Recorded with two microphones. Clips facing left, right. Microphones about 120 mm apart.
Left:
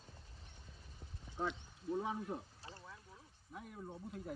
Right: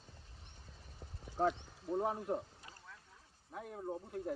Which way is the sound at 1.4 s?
60° right (ahead or behind).